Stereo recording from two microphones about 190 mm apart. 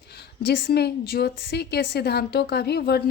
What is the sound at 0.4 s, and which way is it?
A woman's voice, 60° left (ahead or behind).